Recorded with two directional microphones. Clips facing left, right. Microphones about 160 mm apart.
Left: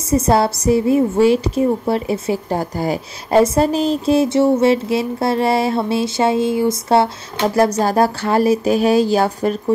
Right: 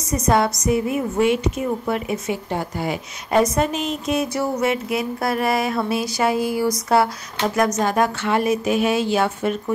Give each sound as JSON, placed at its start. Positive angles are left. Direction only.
{"t": 0.1, "sound": "a woman's voice", "side_deg": 30}